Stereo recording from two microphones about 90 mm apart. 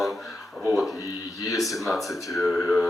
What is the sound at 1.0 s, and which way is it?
Speech, 40° left (ahead or behind).